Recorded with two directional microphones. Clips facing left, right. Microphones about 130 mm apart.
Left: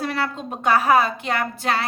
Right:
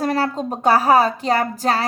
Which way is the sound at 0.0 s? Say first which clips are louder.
Right 5 dB; 40° right (ahead or behind).